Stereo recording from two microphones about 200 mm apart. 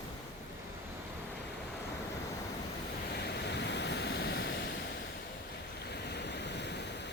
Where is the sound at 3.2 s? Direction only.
60° left (ahead or behind).